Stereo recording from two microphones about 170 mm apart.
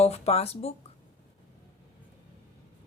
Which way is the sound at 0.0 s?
40° left (ahead or behind).